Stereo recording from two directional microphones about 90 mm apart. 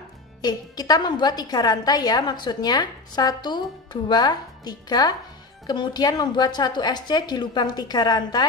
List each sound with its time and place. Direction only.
0.4 s a woman's voice: 50° left (ahead or behind)